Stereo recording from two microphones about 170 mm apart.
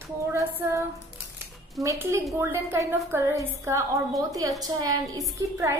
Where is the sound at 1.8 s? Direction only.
20° right (ahead or behind).